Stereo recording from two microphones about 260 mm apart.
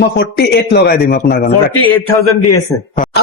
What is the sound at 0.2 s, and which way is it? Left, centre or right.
A man's voice, left.